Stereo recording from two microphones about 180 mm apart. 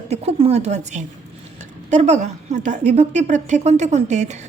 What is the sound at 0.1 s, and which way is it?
A woman's voice, 35° right (ahead or behind).